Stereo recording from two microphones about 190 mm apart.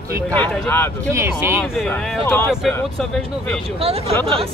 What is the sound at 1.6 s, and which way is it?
Speech, centre (ahead or behind).